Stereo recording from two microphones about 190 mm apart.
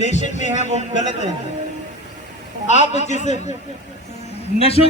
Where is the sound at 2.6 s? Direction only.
35° left (ahead or behind).